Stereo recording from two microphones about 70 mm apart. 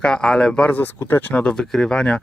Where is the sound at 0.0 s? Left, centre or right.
Centre.